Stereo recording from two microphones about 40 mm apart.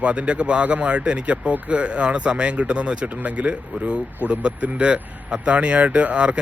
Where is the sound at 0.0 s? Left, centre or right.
Right.